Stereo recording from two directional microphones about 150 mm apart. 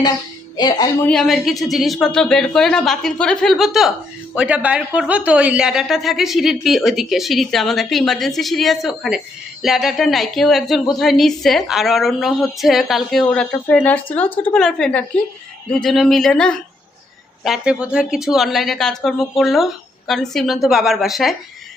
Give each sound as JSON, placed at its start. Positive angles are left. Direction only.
{"t": 0.5, "sound": "speech", "side_deg": 25}
{"t": 1.0, "sound": "a woman's voice", "side_deg": 5}